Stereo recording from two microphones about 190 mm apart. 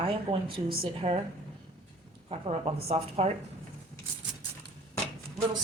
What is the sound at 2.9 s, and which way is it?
Speech, 35° right (ahead or behind).